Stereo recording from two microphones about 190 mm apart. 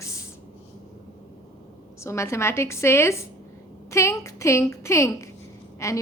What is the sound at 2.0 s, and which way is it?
A woman's voice, 15° left (ahead or behind).